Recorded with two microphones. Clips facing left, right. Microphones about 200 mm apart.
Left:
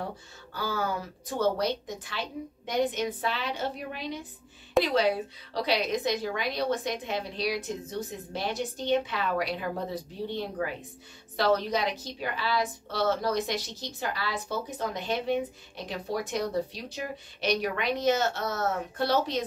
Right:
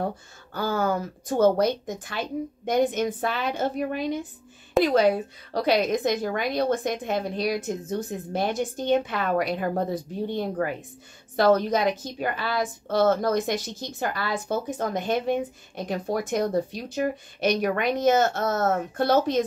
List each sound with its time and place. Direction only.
0.0 s a woman's voice: 50° right (ahead or behind)